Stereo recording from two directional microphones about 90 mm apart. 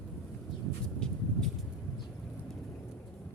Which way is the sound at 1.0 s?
10° left (ahead or behind).